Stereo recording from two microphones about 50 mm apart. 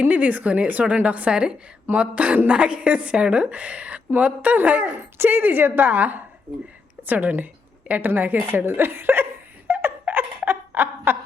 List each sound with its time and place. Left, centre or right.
0.0 s a woman's voice: right
5.1 s a woman's voice: right
8.1 s a woman's voice: right
9.6 s laughter: right